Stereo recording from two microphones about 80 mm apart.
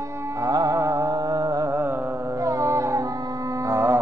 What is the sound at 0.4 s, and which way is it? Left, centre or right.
Music, right.